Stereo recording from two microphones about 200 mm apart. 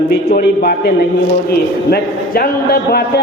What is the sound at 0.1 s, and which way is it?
A man's voice, 55° left (ahead or behind).